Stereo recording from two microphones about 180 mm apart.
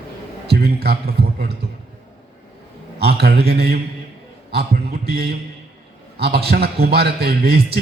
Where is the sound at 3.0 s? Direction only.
65° right (ahead or behind).